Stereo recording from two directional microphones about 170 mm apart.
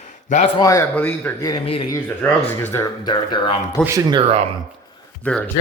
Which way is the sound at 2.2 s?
10° left (ahead or behind).